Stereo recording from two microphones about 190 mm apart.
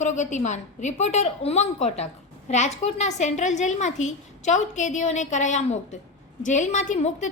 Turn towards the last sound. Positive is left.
turn(degrees=40)  # may be behind; listen again after turning